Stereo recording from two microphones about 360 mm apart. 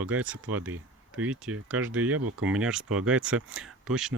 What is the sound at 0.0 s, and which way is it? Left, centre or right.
Speech, centre.